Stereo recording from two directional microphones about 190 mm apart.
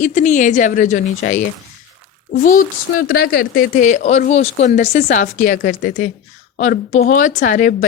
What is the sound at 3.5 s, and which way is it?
A woman's voice, 45° left (ahead or behind).